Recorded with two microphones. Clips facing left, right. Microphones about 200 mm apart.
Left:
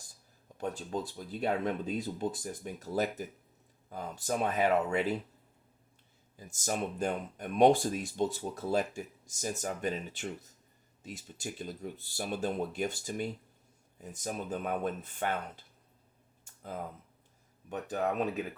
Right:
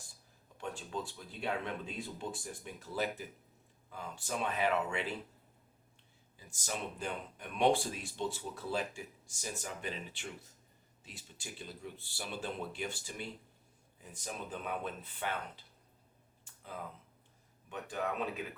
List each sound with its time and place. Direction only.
0.6 s speech: 40° left (ahead or behind)
6.3 s speech: 45° left (ahead or behind)
16.4 s a sound: 45° left (ahead or behind)
17.7 s speech: 40° left (ahead or behind)